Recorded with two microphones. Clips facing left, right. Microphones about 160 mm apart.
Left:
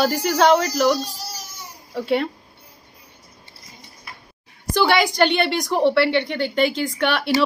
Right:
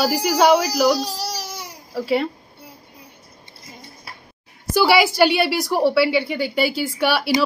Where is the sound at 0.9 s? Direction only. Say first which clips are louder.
Right 3 dB; 75° right (ahead or behind).